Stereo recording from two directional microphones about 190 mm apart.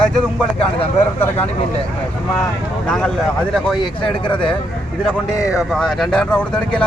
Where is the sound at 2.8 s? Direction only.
5° left (ahead or behind).